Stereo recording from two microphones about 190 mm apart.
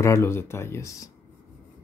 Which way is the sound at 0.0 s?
15° left (ahead or behind).